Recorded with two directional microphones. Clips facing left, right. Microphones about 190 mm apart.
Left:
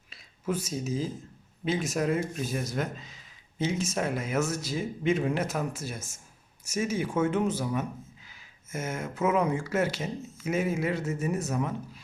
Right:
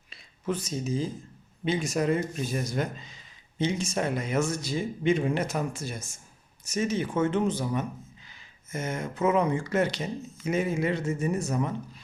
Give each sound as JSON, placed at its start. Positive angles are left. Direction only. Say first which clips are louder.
{"t": 0.1, "sound": "speech", "louder": "even", "side_deg": 5}